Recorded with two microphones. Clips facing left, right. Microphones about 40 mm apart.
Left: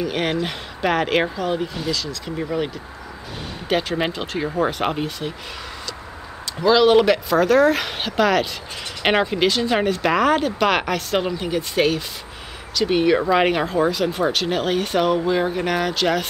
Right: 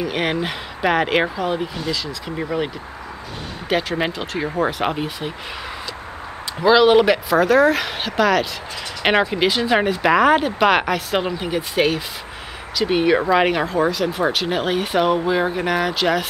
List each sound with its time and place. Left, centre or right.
0.0 s speech: centre
3.6 s speech: centre
6.6 s speech: centre
13.4 s speech: centre